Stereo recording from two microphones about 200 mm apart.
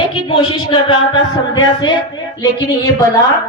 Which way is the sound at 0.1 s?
25° left (ahead or behind).